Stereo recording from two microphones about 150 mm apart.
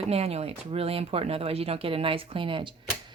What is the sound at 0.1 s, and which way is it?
A woman's voice, 45° right (ahead or behind).